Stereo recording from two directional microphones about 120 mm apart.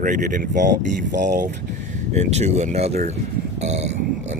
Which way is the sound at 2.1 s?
65° right (ahead or behind).